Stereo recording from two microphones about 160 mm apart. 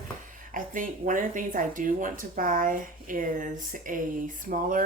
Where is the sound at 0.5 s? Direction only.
55° right (ahead or behind).